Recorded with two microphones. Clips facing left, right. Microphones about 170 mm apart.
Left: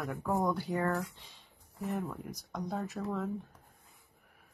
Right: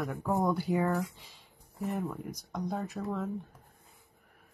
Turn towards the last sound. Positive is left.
turn(degrees=0)  # may be behind; listen again after turning